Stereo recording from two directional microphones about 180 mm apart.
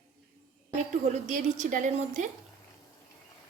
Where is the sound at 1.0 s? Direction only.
45° right (ahead or behind).